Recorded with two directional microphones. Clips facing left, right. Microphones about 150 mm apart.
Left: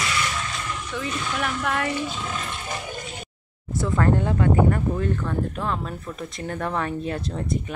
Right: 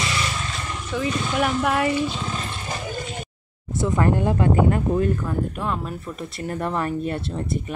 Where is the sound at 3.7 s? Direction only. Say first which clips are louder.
Right 1 dB; 20° right (ahead or behind); by 7.2 s centre (ahead or behind).